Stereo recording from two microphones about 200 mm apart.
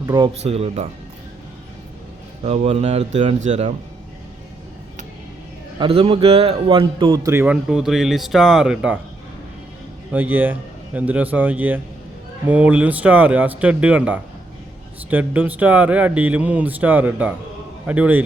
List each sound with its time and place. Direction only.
0.0 s speech: 20° right (ahead or behind)
0.4 s speech: 30° right (ahead or behind)
2.4 s speech: 35° right (ahead or behind)
5.8 s speech: 30° right (ahead or behind); by 9.0 s 5° right (ahead or behind)
10.1 s speech: 10° right (ahead or behind)